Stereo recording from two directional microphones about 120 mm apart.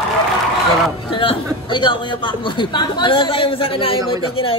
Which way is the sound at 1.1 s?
50° left (ahead or behind).